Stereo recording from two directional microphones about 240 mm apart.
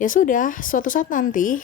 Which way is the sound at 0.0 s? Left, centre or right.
Left.